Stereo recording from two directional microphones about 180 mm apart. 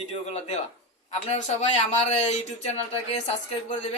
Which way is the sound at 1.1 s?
40° left (ahead or behind).